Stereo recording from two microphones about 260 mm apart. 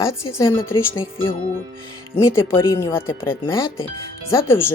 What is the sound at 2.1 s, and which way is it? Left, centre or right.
Speech, centre.